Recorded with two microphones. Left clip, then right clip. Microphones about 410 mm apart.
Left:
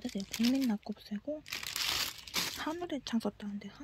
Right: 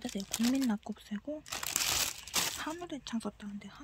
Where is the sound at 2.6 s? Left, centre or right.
Centre.